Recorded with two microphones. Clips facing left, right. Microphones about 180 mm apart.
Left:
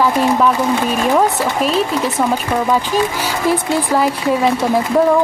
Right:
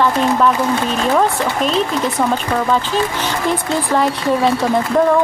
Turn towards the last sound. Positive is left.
turn(degrees=5)  # may be behind; listen again after turning